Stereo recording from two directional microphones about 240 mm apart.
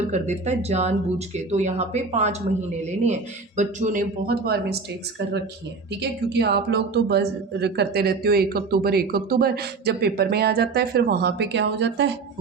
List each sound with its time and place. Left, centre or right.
0.0 s speech: right
6.0 s speech: right